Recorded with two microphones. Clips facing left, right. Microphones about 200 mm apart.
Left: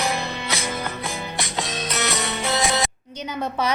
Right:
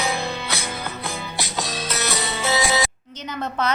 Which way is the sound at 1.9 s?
Centre (ahead or behind).